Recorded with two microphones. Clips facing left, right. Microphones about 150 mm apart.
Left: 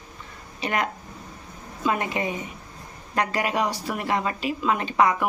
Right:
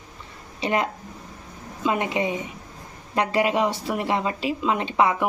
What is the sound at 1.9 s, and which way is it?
A woman's voice, 20° right (ahead or behind).